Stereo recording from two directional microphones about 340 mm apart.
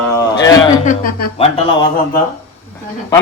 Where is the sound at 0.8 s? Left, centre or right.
Left.